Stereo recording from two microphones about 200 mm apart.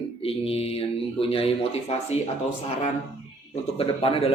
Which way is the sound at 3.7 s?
30° left (ahead or behind).